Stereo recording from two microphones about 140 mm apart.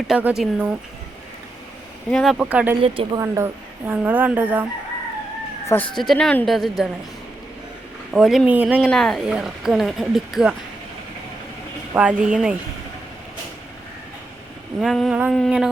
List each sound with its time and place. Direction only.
0.2 s speech: 10° right (ahead or behind)
2.0 s speech: 5° left (ahead or behind)
2.3 s speech: 10° right (ahead or behind)
2.8 s speech: 40° right (ahead or behind)
3.2 s speech: 20° right (ahead or behind)
5.6 s speech: 15° left (ahead or behind)
5.9 s speech: centre (ahead or behind)
8.1 s speech: 5° right (ahead or behind)
8.8 s speech: 5° left (ahead or behind)
11.9 s speech: 10° right (ahead or behind)
14.8 s speech: centre (ahead or behind)